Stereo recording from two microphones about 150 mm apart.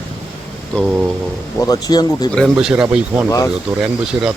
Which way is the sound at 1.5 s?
25° left (ahead or behind).